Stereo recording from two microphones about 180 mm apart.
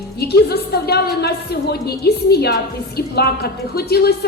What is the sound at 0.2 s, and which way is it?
A woman's voice, 60° left (ahead or behind).